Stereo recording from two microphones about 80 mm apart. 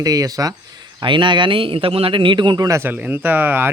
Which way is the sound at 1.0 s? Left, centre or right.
Right.